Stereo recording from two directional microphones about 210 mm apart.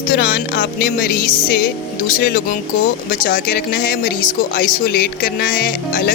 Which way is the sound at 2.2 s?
45° left (ahead or behind).